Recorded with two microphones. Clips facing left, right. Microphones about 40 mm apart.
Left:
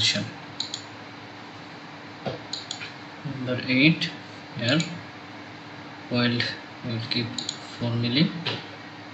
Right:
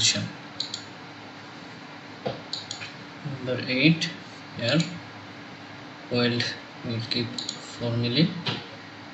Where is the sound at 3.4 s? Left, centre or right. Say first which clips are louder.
Left 2 dB; centre.